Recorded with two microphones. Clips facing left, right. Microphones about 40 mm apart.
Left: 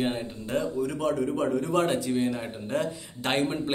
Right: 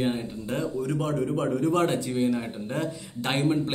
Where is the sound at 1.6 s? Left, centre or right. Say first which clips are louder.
Right 1 dB; left.